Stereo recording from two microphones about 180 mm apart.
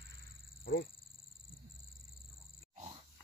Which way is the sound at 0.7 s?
60° left (ahead or behind).